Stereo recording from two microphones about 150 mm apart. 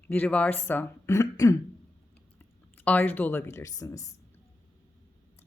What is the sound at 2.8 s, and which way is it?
Speech, 10° left (ahead or behind).